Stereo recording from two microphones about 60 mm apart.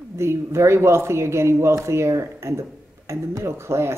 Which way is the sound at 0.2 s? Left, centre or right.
Right.